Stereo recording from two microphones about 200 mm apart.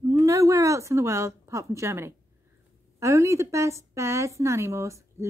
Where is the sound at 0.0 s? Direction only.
15° right (ahead or behind).